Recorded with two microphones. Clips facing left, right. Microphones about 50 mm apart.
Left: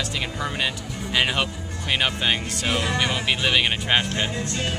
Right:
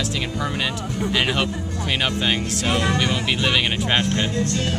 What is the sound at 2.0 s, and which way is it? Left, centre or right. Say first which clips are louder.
Speech: right 1 dB; centre.